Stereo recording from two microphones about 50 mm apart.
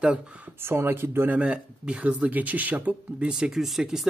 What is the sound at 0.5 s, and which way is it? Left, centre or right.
Speech, right.